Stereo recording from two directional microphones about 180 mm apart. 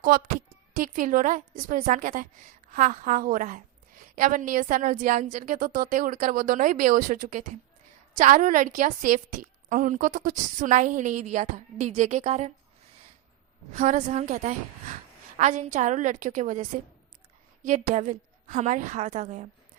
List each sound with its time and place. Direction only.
0.0 s a woman's voice: 50° right (ahead or behind)
13.7 s a woman's voice: 40° right (ahead or behind)